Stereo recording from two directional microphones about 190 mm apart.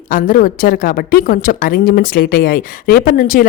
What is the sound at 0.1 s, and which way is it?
A woman's voice, 45° left (ahead or behind).